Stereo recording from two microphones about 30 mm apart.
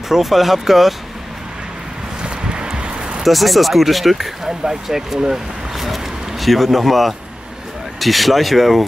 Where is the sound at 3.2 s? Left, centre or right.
Centre.